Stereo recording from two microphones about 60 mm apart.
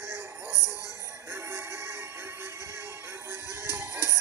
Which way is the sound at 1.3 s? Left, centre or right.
Right.